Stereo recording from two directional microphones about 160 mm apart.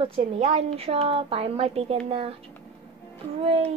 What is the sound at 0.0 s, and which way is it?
A woman's voice, 40° right (ahead or behind).